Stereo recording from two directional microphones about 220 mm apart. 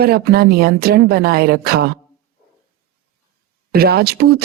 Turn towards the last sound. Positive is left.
turn(degrees=-45)  # may be behind; listen again after turning